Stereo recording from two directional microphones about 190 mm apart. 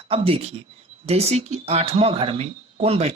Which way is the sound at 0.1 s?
30° right (ahead or behind).